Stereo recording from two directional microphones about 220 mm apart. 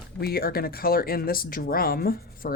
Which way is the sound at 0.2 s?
45° left (ahead or behind).